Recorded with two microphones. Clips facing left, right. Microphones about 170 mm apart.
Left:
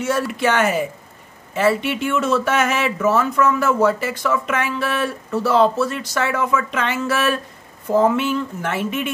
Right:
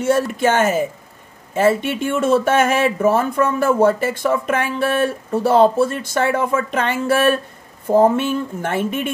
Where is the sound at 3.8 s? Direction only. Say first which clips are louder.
Right 3 dB; 55° right (ahead or behind).